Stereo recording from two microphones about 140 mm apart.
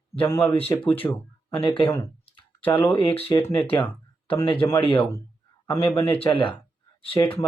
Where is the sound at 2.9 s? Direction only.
35° left (ahead or behind).